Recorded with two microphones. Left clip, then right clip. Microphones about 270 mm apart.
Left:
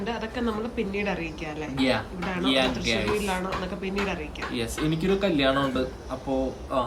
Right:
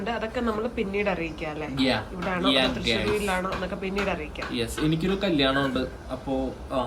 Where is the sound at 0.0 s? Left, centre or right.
Centre.